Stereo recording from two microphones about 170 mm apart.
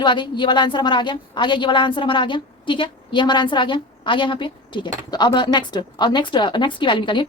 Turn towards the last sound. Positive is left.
turn(degrees=30)  # may be behind; listen again after turning